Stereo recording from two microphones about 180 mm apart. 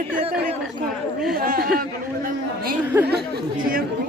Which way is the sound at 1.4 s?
55° right (ahead or behind).